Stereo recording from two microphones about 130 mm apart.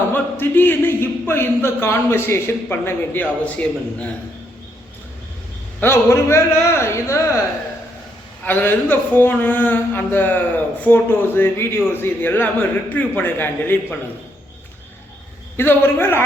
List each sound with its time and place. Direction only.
0.1 s a man's voice: 15° left (ahead or behind)
5.8 s a man's voice: 20° left (ahead or behind)
8.4 s a man's voice: 15° left (ahead or behind)
15.5 s a man's voice: 15° left (ahead or behind)